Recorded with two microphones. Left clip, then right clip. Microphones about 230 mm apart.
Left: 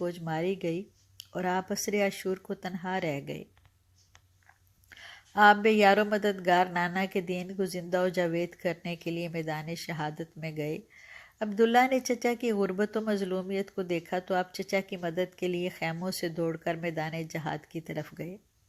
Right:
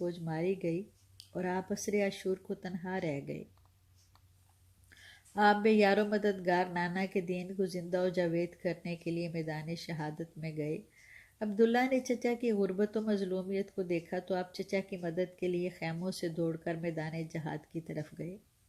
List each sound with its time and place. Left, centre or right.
0.0 s speech: centre
4.9 s speech: centre